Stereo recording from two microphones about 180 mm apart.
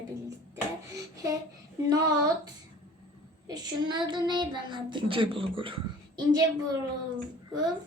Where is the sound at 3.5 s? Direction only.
25° right (ahead or behind).